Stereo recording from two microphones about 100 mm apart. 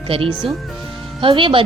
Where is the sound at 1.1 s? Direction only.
55° right (ahead or behind).